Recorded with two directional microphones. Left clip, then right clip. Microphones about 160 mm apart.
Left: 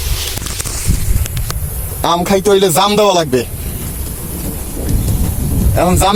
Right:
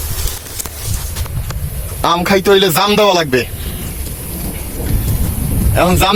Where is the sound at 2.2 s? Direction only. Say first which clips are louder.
Right 1 dB; 5° left (ahead or behind).